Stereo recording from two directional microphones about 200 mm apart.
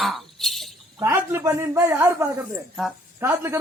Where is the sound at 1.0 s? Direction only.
15° right (ahead or behind).